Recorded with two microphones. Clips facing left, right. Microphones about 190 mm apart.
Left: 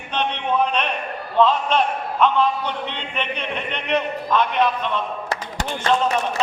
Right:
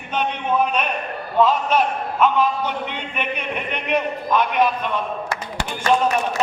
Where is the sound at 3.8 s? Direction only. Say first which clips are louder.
Even; 10° right (ahead or behind).